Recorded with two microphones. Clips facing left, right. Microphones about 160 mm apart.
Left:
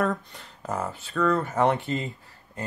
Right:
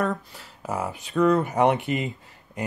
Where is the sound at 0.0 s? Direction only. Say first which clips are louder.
Even; 5° right (ahead or behind).